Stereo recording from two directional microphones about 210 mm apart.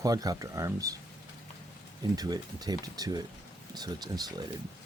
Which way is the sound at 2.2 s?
20° right (ahead or behind).